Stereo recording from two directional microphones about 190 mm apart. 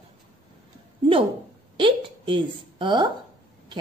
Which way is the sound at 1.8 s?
25° right (ahead or behind).